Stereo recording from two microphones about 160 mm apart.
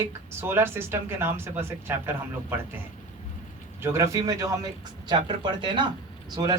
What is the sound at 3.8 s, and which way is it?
Speech, 15° right (ahead or behind).